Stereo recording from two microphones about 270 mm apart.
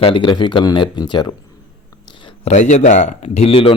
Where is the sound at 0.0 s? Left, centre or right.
Centre.